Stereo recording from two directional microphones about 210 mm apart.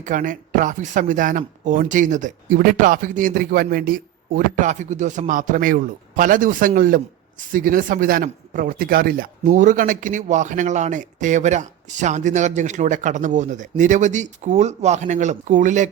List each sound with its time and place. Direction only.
0.0 s speech: 40° right (ahead or behind)